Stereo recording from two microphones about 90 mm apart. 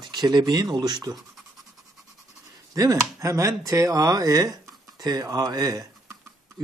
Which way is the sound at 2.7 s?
40° right (ahead or behind).